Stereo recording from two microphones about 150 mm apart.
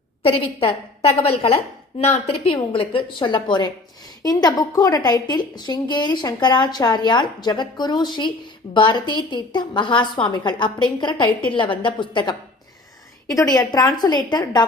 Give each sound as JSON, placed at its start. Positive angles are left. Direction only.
{"t": 0.2, "sound": "a woman's voice", "side_deg": 40}